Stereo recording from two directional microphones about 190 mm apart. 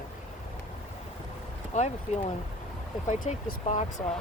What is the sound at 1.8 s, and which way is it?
Speech, 35° left (ahead or behind).